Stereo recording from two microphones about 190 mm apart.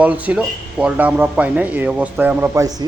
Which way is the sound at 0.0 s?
10° right (ahead or behind).